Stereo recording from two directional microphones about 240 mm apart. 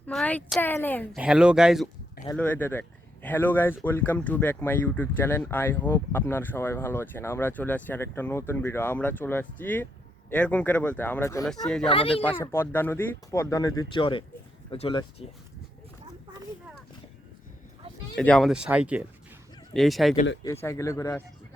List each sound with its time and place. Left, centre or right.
0.0 s a woman's voice: centre
1.2 s speech: centre
11.9 s speech: left
12.2 s speech: centre
18.2 s speech: centre
20.4 s speech: centre